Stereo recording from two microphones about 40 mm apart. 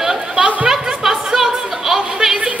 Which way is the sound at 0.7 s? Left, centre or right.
Centre.